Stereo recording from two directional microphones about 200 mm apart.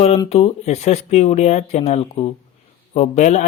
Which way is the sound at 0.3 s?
35° left (ahead or behind).